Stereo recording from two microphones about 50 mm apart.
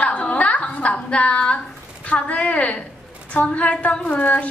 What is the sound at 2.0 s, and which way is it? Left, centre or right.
A woman's voice, left.